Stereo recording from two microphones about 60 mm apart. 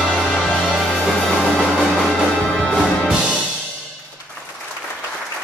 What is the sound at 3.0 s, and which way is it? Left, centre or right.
Music, centre.